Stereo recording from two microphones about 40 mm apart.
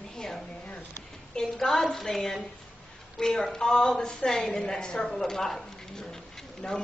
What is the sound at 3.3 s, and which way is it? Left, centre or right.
A woman's voice, centre.